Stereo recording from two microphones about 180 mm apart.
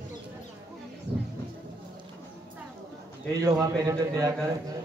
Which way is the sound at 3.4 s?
20° right (ahead or behind).